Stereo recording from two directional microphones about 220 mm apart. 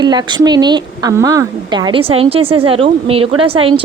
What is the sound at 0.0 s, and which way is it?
A woman's voice, 20° right (ahead or behind).